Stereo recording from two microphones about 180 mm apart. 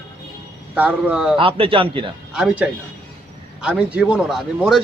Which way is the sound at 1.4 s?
30° right (ahead or behind).